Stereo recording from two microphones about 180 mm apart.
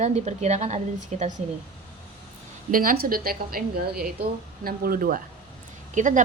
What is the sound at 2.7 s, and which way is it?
A woman's voice, 50° right (ahead or behind).